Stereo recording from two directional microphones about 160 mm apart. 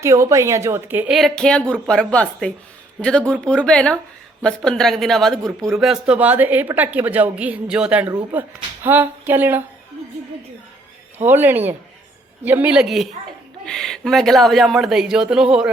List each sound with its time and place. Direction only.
0.0 s a woman's voice: 20° right (ahead or behind)
1.1 s a woman's voice: centre (ahead or behind)
11.3 s a woman's voice: 10° right (ahead or behind)